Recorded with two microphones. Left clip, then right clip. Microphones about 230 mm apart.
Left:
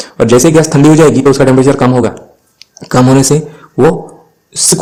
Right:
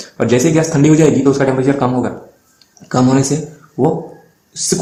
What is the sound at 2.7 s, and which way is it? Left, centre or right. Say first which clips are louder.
Speech: left 6 dB; left.